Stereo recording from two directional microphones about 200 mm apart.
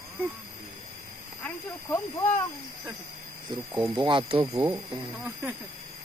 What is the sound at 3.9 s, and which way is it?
Speech, 25° right (ahead or behind).